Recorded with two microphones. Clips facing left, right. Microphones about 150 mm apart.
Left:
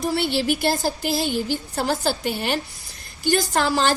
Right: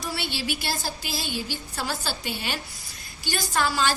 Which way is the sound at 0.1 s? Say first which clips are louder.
Left 7 dB; 50° left (ahead or behind).